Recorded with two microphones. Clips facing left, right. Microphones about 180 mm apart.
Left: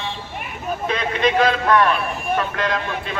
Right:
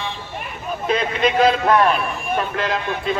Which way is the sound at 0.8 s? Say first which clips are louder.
Right 2 dB; 30° right (ahead or behind).